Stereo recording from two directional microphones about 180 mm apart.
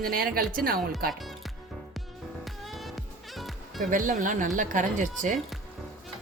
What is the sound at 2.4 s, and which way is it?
Music, centre (ahead or behind).